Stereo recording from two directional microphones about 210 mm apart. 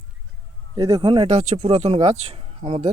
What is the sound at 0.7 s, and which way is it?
Speech, 20° right (ahead or behind).